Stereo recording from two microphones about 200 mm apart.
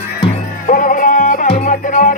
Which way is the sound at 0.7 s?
40° left (ahead or behind).